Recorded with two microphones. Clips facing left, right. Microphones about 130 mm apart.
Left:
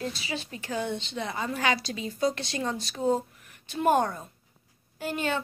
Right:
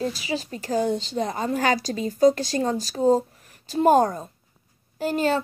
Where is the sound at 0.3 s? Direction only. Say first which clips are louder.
Right 7 dB; 40° right (ahead or behind).